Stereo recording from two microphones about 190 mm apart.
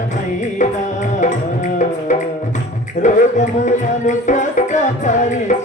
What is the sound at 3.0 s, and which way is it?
Music, 40° left (ahead or behind).